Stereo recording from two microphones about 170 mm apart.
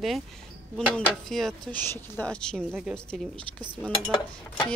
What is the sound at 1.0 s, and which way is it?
Speech, centre (ahead or behind).